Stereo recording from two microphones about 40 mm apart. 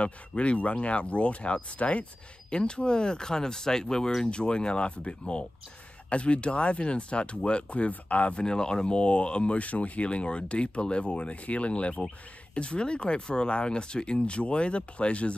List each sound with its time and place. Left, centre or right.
0.0 s speech: left
8.5 s speech: centre